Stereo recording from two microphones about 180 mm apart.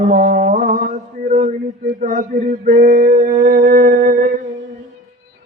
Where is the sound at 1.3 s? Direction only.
45° right (ahead or behind).